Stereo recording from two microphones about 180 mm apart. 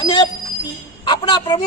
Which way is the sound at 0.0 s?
20° left (ahead or behind).